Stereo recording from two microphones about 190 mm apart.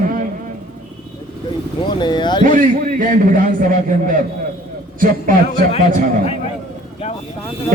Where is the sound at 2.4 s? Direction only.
45° right (ahead or behind).